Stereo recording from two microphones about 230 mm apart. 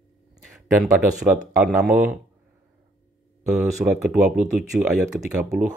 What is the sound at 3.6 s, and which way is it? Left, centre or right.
Speech, centre.